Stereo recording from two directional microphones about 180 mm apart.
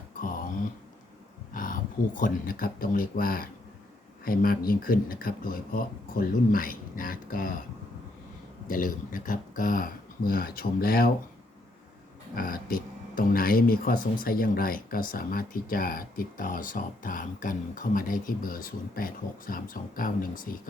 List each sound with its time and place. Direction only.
1.5 s speech: 50° left (ahead or behind)
8.6 s speech: 50° left (ahead or behind)
12.4 s speech: 55° left (ahead or behind)